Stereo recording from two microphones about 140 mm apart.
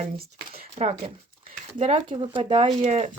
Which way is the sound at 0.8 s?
50° right (ahead or behind).